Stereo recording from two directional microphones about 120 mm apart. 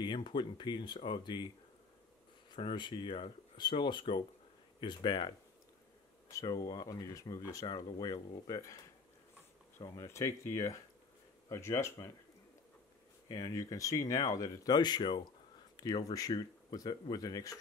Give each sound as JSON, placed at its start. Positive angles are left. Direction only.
{"t": 0.0, "sound": "speech", "side_deg": 40}
{"t": 2.5, "sound": "speech", "side_deg": 40}
{"t": 6.3, "sound": "speech", "side_deg": 30}
{"t": 9.8, "sound": "speech", "side_deg": 25}
{"t": 13.3, "sound": "speech", "side_deg": 30}